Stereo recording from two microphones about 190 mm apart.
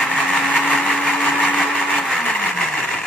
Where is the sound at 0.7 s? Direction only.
5° left (ahead or behind).